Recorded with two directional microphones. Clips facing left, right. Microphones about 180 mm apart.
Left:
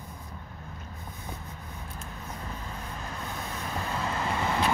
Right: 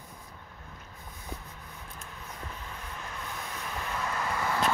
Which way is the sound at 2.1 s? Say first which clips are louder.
Left 3 dB; 40° left (ahead or behind).